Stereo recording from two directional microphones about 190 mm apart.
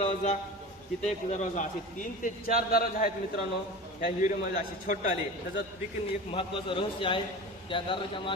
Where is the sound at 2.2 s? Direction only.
50° left (ahead or behind).